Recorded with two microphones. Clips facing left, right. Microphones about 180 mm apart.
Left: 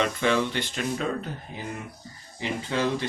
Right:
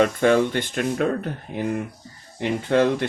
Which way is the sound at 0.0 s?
50° right (ahead or behind).